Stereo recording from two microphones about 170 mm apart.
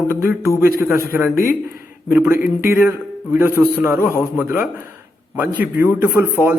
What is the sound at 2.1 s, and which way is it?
Speech, 10° right (ahead or behind).